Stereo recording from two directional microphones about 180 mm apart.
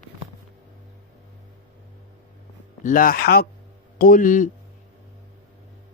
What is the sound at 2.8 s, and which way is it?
Mantra, 50° left (ahead or behind).